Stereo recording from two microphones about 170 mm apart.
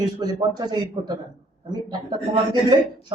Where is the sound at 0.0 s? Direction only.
20° right (ahead or behind).